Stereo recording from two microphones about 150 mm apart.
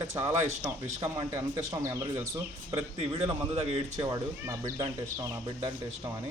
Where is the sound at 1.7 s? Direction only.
20° right (ahead or behind).